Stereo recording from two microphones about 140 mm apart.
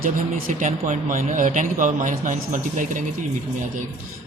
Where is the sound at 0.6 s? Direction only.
65° right (ahead or behind).